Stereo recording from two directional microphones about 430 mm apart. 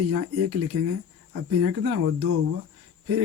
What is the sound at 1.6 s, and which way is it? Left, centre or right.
Speech, right.